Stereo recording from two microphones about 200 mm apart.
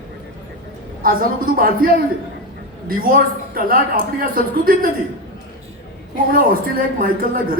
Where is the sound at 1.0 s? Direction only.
45° right (ahead or behind).